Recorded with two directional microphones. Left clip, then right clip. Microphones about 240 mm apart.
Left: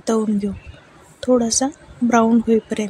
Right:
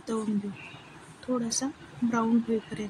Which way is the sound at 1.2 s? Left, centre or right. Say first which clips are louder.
Left 14 dB; left.